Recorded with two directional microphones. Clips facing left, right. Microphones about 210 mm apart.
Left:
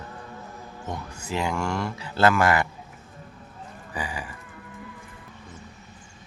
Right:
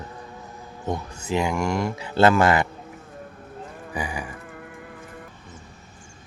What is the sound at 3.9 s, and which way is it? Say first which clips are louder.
Livestock: right 3 dB; 15° right (ahead or behind).